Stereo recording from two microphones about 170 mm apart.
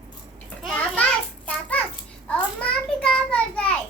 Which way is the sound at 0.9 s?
10° left (ahead or behind).